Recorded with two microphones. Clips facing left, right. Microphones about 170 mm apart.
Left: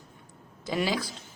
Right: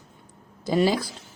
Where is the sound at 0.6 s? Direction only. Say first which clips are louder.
Right 7 dB; 40° right (ahead or behind).